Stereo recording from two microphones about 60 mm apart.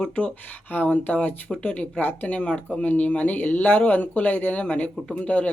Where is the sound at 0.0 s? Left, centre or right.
Left.